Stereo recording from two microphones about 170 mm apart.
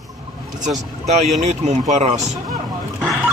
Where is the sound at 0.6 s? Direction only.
45° right (ahead or behind).